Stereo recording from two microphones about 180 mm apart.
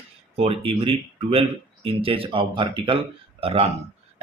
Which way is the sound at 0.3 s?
30° right (ahead or behind).